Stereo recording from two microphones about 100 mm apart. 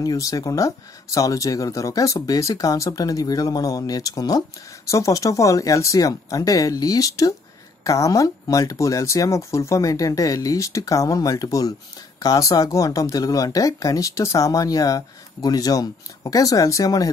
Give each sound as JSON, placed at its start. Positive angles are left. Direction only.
{"t": 0.0, "sound": "speech", "side_deg": 35}